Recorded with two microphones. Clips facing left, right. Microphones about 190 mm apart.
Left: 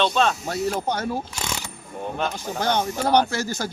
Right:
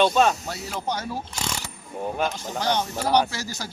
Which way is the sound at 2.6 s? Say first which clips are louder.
Left 2 dB; 55° left (ahead or behind).